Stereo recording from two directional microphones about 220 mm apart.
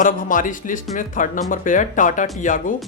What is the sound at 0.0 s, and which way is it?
Speech, 35° left (ahead or behind).